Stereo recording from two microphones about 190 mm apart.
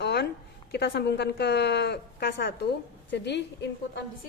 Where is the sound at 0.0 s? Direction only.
60° left (ahead or behind).